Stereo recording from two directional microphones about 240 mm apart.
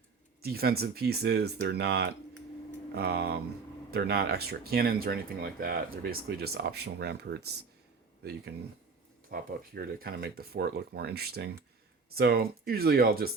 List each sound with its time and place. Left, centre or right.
0.4 s speech: right
9.3 s speech: right